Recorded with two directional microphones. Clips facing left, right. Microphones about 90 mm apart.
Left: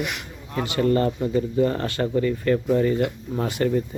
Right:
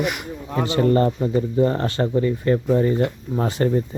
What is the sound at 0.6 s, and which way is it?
Speech, 30° right (ahead or behind).